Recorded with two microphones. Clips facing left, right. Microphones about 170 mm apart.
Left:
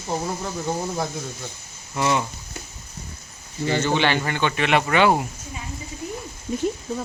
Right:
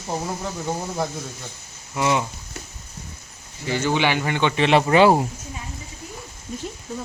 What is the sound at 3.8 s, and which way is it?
Speech, 10° right (ahead or behind).